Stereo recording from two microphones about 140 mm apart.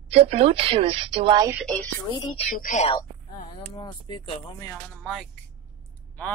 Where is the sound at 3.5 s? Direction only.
35° left (ahead or behind).